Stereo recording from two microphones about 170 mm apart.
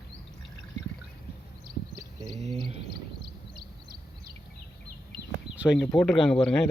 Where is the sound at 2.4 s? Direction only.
40° right (ahead or behind).